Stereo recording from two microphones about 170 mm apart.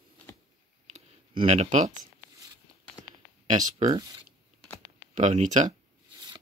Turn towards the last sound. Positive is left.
turn(degrees=-45)  # may be behind; listen again after turning